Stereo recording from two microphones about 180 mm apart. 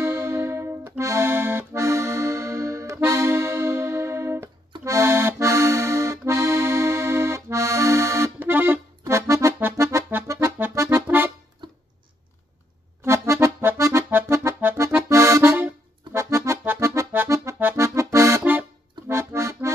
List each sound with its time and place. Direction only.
0.0 s accordion: 15° right (ahead or behind)
11.6 s a sound: 25° right (ahead or behind)
13.0 s accordion: 15° right (ahead or behind)